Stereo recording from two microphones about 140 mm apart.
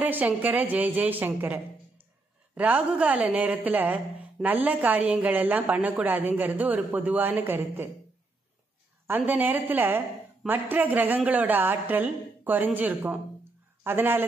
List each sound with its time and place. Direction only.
0.0 s a woman's voice: 10° right (ahead or behind)
9.0 s a woman's voice: 15° right (ahead or behind)